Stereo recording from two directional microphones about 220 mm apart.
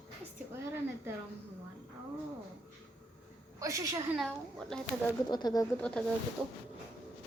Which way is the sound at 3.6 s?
15° right (ahead or behind).